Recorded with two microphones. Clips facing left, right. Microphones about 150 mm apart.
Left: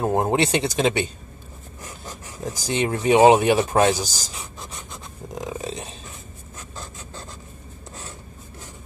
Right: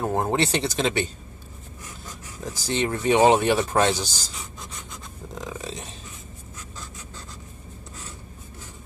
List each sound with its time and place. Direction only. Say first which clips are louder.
0.0 s speech: left 3 dB; 20° left (ahead or behind)
2.4 s speech: left 2 dB; 15° left (ahead or behind)
4.4 s a sound: left 2 dB; 25° left (ahead or behind)